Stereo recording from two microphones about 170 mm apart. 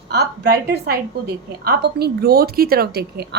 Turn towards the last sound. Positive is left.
turn(degrees=-70)  # may be behind; listen again after turning